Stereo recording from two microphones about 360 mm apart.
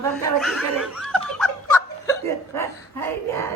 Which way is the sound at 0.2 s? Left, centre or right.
Centre.